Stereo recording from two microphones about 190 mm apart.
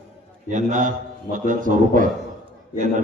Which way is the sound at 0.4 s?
40° right (ahead or behind).